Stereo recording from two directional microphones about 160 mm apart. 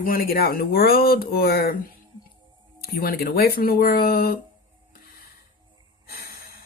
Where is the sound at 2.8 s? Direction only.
70° left (ahead or behind).